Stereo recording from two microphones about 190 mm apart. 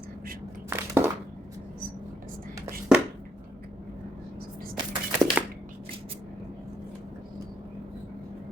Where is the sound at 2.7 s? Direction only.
5° right (ahead or behind).